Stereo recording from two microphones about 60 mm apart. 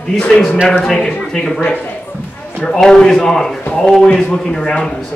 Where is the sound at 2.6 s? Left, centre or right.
Centre.